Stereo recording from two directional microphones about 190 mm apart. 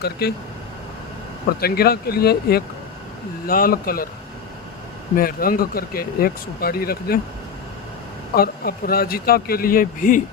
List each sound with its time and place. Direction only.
0.0 s speech: 55° left (ahead or behind)
1.6 s speech: 55° left (ahead or behind)
5.1 s speech: 50° left (ahead or behind)
8.4 s speech: 50° left (ahead or behind)